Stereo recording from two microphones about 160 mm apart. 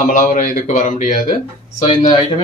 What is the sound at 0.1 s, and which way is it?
A man's voice, 55° left (ahead or behind).